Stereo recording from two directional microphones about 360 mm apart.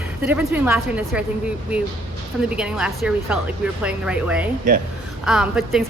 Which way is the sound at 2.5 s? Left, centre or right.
Centre.